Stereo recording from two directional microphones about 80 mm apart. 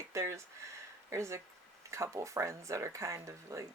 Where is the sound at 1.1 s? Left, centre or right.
Right.